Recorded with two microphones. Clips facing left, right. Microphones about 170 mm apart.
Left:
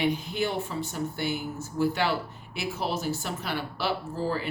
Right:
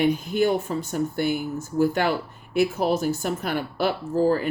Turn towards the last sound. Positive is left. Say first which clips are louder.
# right 9 dB
turn(degrees=-45)  # may be behind; listen again after turning